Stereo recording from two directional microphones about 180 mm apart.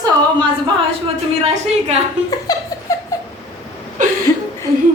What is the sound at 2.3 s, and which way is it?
Laughter, 20° left (ahead or behind).